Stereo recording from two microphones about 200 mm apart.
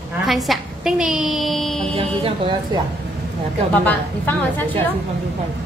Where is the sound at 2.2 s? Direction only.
25° right (ahead or behind).